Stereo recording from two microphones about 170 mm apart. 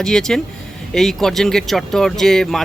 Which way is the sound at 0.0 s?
5° left (ahead or behind).